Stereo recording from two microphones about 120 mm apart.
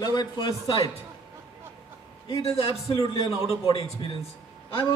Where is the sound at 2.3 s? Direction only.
55° left (ahead or behind).